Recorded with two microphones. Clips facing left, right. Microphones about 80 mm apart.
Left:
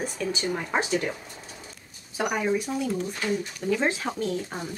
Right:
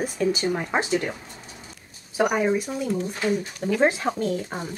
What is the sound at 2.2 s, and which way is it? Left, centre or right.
Speech, right.